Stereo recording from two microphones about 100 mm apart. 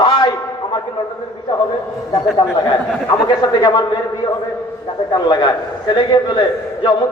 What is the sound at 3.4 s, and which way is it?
Speech, 45° left (ahead or behind).